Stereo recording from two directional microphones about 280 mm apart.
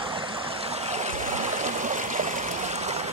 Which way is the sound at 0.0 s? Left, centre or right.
Centre.